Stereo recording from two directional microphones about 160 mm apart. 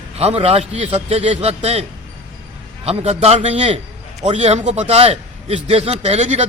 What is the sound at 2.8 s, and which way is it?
A man's voice, 40° right (ahead or behind).